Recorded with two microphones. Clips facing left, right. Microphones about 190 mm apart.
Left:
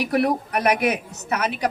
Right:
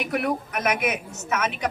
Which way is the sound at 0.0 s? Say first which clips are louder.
Left 5 dB; 35° left (ahead or behind).